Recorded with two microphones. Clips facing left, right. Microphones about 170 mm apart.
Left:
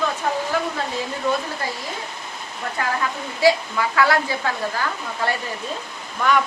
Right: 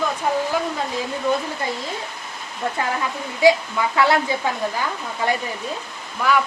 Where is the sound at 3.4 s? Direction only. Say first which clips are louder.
Right 2 dB; 20° right (ahead or behind).